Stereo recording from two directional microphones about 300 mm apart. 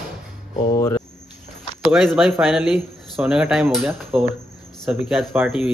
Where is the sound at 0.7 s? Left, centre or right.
Centre.